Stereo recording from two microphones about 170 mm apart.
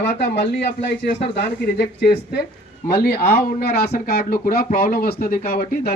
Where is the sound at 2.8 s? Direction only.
70° left (ahead or behind).